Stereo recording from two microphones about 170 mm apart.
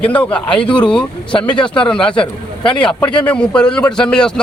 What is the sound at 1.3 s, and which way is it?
Speech, 30° left (ahead or behind).